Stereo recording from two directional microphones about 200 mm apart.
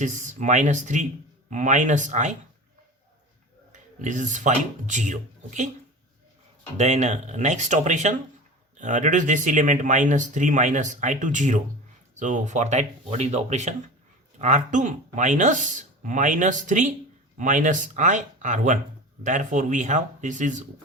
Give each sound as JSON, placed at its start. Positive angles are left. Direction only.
{"t": 0.0, "sound": "speech", "side_deg": -40}
{"t": 3.7, "sound": "speech", "side_deg": -40}
{"t": 6.7, "sound": "speech", "side_deg": -35}